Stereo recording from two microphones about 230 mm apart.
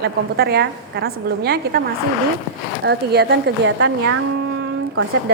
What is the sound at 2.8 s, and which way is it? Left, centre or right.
Speech, right.